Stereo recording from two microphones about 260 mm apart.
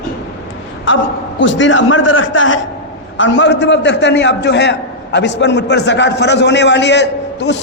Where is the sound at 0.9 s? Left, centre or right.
Left.